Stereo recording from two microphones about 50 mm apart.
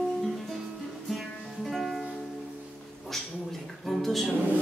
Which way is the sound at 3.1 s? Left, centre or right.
Centre.